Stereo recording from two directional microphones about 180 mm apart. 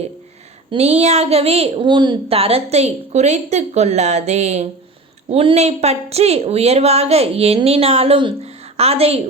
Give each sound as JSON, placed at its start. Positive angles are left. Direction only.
{"t": 0.7, "sound": "a woman's voice", "side_deg": -35}